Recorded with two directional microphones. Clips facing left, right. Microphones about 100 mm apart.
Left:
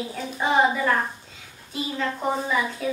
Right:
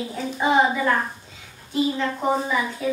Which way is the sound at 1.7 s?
5° right (ahead or behind).